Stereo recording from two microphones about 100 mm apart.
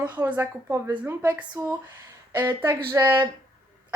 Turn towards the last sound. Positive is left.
turn(degrees=-25)  # may be behind; listen again after turning